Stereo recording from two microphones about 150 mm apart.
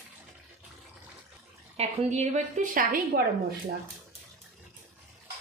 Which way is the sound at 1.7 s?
45° right (ahead or behind).